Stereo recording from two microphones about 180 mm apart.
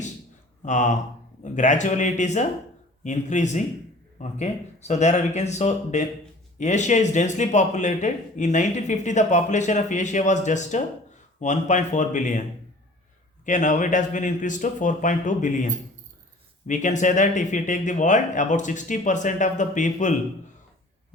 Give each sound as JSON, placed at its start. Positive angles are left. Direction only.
{"t": 0.6, "sound": "a man's voice", "side_deg": 40}
{"t": 13.4, "sound": "speech", "side_deg": 45}